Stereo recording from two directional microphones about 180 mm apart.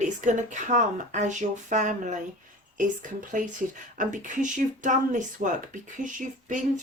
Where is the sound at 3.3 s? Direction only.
45° right (ahead or behind).